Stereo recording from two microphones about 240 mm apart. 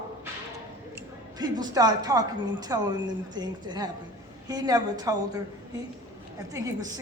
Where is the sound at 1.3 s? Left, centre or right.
Centre.